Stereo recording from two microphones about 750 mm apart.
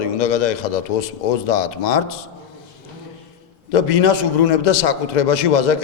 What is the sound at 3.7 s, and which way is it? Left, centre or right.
A man's voice, left.